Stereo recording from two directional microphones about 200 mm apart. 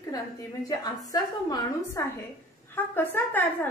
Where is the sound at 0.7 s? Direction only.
20° left (ahead or behind).